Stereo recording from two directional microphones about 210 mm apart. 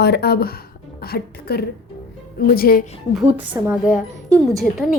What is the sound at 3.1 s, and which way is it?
A woman's voice, 5° right (ahead or behind).